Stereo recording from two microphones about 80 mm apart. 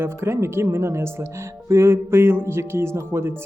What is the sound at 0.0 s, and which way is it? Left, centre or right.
Speech, right.